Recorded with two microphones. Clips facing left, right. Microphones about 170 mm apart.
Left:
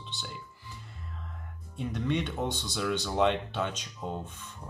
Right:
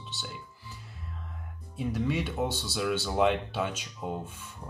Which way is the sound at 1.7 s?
5° right (ahead or behind).